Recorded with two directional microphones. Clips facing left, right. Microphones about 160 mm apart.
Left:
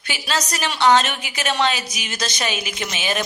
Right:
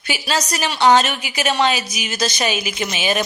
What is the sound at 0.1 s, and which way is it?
A woman's voice, 10° right (ahead or behind).